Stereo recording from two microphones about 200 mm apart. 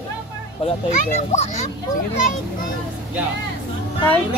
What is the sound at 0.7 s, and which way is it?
A child's voice, 35° left (ahead or behind).